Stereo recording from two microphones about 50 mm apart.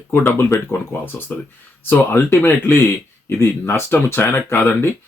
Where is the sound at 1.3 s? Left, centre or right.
Left.